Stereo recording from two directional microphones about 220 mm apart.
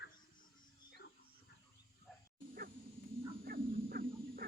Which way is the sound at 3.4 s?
45° right (ahead or behind).